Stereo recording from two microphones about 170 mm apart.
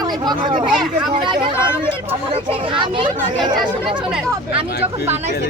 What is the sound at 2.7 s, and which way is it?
Speech, 30° right (ahead or behind).